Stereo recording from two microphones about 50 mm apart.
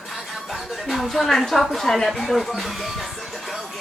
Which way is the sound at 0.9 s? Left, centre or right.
Centre.